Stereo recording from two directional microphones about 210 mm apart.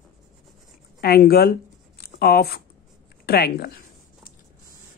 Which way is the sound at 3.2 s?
50° left (ahead or behind).